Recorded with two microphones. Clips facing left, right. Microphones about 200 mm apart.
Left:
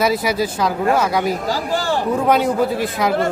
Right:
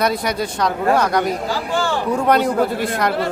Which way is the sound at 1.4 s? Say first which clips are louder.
Left 1 dB; 40° left (ahead or behind).